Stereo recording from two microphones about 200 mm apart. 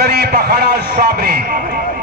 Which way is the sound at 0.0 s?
55° right (ahead or behind).